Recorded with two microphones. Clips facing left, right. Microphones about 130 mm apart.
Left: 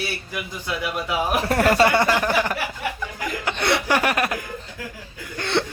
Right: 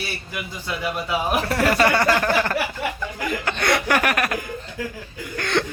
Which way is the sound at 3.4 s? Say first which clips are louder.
Even; 20° left (ahead or behind).